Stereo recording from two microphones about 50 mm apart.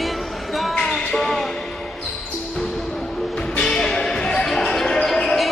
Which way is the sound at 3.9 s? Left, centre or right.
Centre.